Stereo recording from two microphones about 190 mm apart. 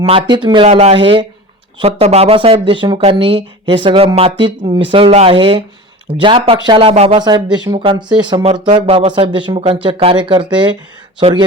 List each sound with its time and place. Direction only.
0.0 s speech: 30° right (ahead or behind)